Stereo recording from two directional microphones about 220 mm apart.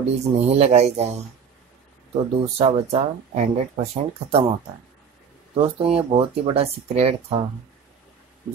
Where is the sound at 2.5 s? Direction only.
25° right (ahead or behind).